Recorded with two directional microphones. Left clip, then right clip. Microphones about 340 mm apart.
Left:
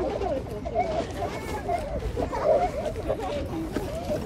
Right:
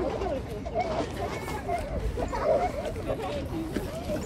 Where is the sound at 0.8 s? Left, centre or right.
Centre.